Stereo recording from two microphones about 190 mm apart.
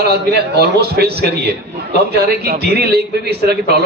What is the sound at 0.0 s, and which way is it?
A man's voice, 60° right (ahead or behind).